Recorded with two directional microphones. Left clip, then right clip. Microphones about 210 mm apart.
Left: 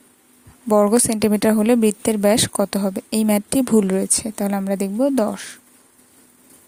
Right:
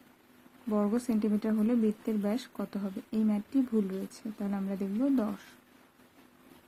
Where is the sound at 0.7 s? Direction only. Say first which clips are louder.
Left 16 dB; 40° left (ahead or behind).